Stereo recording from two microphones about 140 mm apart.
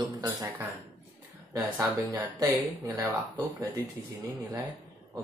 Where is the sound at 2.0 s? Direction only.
25° right (ahead or behind).